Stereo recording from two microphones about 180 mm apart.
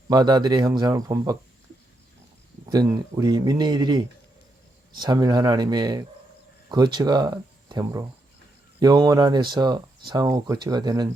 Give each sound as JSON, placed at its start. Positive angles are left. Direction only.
{"t": 0.1, "sound": "speech", "side_deg": -25}
{"t": 2.6, "sound": "speech", "side_deg": -20}